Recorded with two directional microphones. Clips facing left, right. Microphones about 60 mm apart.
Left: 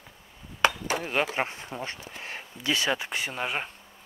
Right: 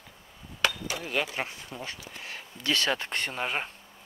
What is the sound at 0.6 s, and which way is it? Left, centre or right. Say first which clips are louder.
Speech: left 5 dB; left.